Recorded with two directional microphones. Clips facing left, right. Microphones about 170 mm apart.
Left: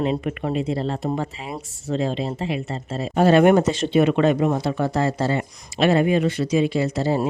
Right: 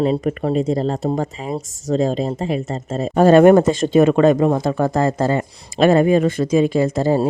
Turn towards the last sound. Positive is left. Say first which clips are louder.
# right 5 dB
turn(degrees=-50)  # may be behind; listen again after turning